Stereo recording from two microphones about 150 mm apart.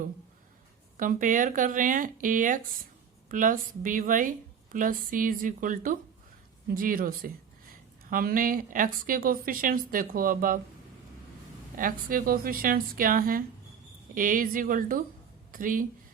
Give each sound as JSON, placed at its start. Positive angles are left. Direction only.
{"t": 0.9, "sound": "a woman's voice", "side_deg": -60}
{"t": 11.8, "sound": "a woman's voice", "side_deg": -70}